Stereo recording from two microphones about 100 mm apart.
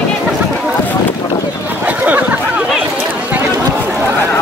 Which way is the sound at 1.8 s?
15° right (ahead or behind).